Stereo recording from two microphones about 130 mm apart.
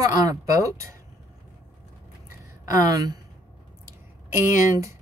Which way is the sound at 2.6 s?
25° right (ahead or behind).